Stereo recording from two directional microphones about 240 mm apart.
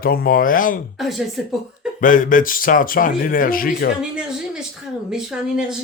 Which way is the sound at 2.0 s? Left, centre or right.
Left.